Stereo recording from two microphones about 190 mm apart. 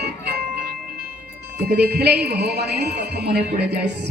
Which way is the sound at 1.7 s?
55° right (ahead or behind).